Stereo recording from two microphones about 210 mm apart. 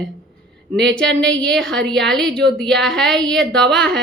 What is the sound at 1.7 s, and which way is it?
Speech, 55° right (ahead or behind).